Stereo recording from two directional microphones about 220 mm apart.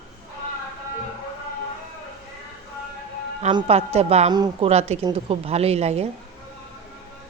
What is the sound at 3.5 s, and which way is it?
A woman's voice, 25° right (ahead or behind).